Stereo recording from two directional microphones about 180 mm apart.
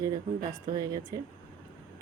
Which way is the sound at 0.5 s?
20° right (ahead or behind).